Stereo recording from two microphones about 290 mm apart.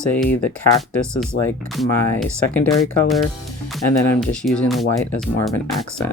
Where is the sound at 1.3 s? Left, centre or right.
Left.